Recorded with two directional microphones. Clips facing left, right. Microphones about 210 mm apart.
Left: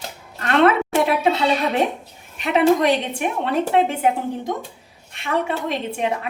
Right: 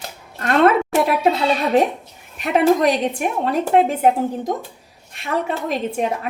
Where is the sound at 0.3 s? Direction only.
40° right (ahead or behind).